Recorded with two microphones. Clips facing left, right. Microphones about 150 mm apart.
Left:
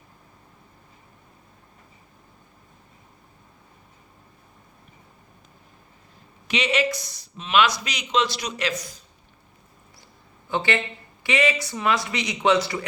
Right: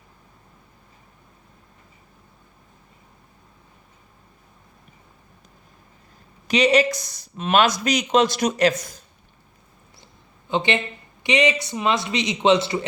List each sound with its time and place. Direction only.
6.5 s speech: 40° right (ahead or behind)
10.5 s speech: 20° right (ahead or behind)